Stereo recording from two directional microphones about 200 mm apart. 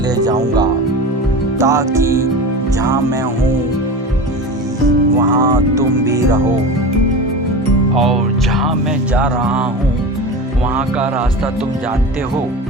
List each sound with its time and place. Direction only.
0.3 s speech: 20° right (ahead or behind)
5.3 s speech: 20° right (ahead or behind)
7.9 s music: centre (ahead or behind)
9.1 s speech: 5° right (ahead or behind)